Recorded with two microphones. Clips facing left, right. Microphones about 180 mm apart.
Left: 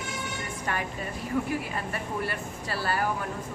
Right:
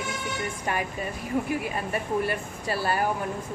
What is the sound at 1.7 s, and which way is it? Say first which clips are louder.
A woman's voice: right 5 dB; 15° right (ahead or behind).